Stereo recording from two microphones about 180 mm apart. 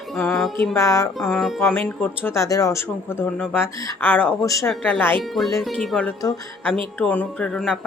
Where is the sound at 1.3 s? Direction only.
Centre (ahead or behind).